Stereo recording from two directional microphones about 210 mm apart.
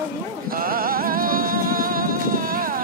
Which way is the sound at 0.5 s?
45° right (ahead or behind).